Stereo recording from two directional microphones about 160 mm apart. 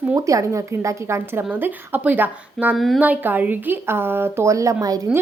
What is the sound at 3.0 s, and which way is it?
A woman's voice, 10° right (ahead or behind).